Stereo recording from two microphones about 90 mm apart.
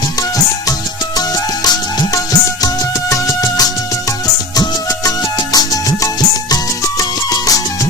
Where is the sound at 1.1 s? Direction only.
45° left (ahead or behind).